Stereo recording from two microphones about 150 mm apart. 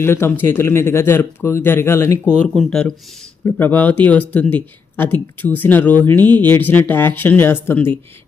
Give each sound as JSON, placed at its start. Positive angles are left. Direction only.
{"t": 0.0, "sound": "speech", "side_deg": 15}
{"t": 2.5, "sound": "speech", "side_deg": 5}